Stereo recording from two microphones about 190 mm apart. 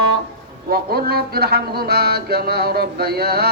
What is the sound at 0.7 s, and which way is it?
A man's voice, 55° right (ahead or behind).